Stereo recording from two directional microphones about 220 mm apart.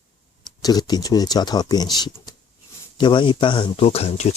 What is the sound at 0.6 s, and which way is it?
Speech, 15° left (ahead or behind).